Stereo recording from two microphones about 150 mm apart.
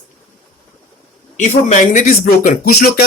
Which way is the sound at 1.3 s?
50° left (ahead or behind).